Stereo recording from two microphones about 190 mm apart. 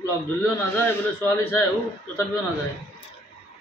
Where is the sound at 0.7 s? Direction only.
10° left (ahead or behind).